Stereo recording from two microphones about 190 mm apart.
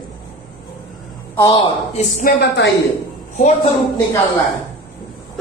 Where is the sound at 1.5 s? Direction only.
25° left (ahead or behind).